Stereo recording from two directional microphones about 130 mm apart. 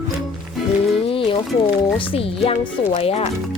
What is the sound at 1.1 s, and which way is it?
Music, 45° left (ahead or behind).